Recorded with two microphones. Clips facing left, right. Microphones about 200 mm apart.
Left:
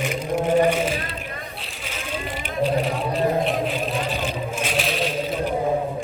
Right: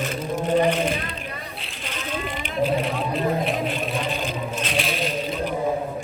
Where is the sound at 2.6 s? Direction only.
Centre (ahead or behind).